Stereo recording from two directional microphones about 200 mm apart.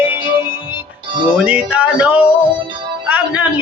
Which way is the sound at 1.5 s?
5° right (ahead or behind).